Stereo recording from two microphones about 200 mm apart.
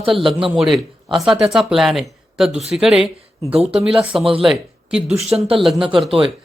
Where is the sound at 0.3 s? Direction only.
25° right (ahead or behind).